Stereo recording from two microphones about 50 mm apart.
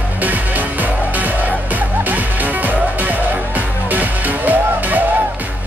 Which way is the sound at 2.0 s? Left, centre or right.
Right.